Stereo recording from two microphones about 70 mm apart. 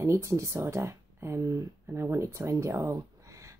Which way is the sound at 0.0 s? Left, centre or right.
Right.